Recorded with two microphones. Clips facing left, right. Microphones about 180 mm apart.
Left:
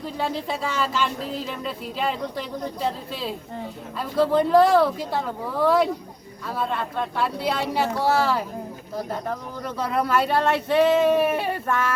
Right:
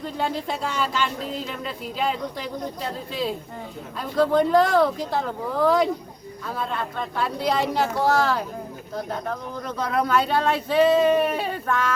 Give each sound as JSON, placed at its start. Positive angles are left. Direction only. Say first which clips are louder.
{"t": 0.0, "sound": "speech", "louder": "even", "side_deg": 0}
{"t": 9.6, "sound": "speech", "louder": "even", "side_deg": 5}